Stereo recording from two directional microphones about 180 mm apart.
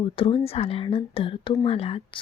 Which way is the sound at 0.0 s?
30° left (ahead or behind).